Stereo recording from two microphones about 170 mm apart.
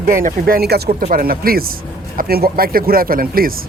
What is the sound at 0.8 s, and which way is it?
Speech, 50° right (ahead or behind).